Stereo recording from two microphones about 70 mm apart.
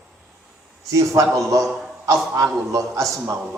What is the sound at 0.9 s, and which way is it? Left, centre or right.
A man's voice, right.